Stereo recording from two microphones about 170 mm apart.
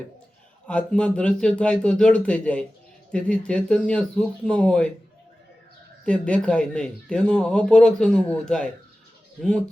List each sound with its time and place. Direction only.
0.7 s speech: 5° left (ahead or behind)
6.1 s speech: 5° left (ahead or behind)